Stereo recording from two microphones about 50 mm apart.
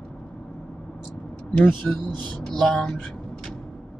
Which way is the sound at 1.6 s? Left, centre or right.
Left.